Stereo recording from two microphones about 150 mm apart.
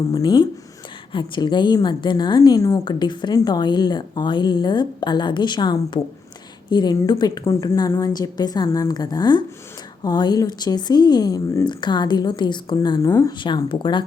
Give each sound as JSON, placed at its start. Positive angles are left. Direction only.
{"t": 0.1, "sound": "a woman's voice", "side_deg": 30}
{"t": 13.4, "sound": "speech", "side_deg": 35}